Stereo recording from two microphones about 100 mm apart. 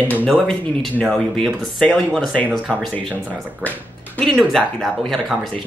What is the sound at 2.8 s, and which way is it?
Speech, centre (ahead or behind).